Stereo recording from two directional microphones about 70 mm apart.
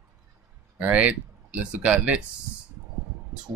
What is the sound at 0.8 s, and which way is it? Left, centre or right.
Speech, right.